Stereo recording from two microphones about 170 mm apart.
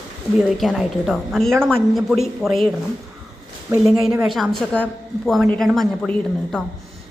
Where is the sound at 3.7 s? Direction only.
20° right (ahead or behind).